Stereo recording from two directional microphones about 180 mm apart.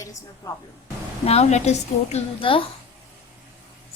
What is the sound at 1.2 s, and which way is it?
A woman's voice, 35° left (ahead or behind).